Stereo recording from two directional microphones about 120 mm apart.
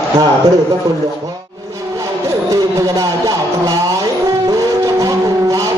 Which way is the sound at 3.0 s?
30° right (ahead or behind).